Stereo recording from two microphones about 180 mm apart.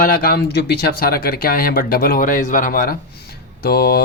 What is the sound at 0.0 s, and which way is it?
Speech, 50° left (ahead or behind).